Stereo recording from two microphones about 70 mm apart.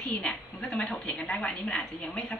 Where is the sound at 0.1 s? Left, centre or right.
Centre.